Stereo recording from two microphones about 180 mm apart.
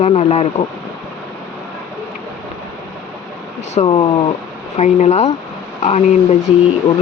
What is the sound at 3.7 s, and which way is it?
Speech, 35° left (ahead or behind).